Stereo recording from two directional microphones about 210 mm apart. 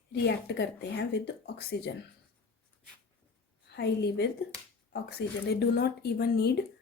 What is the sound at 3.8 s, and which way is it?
Speech, 55° left (ahead or behind).